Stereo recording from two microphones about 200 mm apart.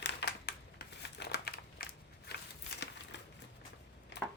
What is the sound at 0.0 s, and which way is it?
Crumpling, 60° left (ahead or behind).